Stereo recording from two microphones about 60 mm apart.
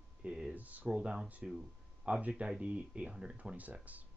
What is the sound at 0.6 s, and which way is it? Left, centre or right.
Speech, right.